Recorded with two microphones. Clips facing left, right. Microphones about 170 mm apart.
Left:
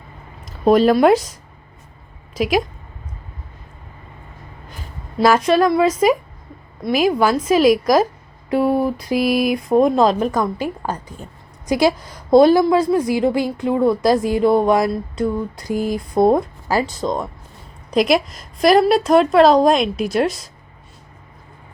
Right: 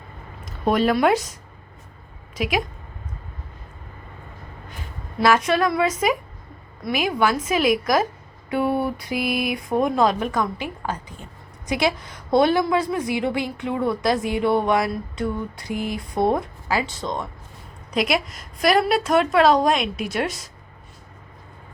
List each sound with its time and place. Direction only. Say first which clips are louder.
0.6 s a woman's voice: left 6 dB; 35° left (ahead or behind)
2.3 s a woman's voice: left 6 dB; 35° left (ahead or behind)
5.2 s a woman's voice: left 5 dB; 35° left (ahead or behind)